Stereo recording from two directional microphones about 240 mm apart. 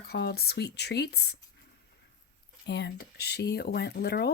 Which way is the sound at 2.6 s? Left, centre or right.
Left.